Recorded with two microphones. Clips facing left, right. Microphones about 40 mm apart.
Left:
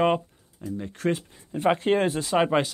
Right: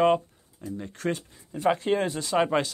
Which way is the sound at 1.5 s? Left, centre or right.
Left.